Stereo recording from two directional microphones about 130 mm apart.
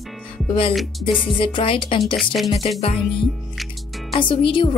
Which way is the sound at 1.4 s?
40° left (ahead or behind).